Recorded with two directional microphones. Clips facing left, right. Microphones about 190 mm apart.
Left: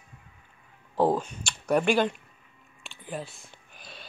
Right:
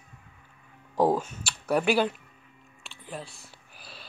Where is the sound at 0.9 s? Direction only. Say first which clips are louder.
Even; 10° right (ahead or behind).